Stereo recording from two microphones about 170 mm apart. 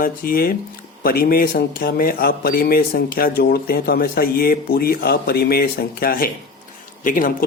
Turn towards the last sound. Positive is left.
turn(degrees=55)  # may be behind; listen again after turning